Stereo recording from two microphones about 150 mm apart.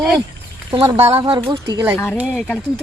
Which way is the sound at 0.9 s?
40° right (ahead or behind).